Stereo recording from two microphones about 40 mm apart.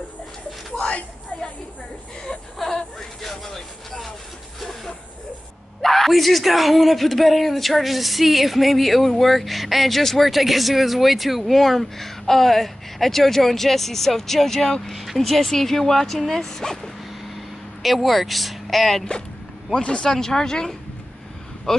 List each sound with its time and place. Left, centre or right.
2.6 s a sound: centre
5.8 s speech: centre
17.8 s speech: centre
19.7 s speech: left
20.1 s speech: centre